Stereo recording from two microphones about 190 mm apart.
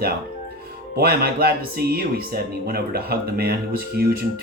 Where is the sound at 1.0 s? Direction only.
55° right (ahead or behind).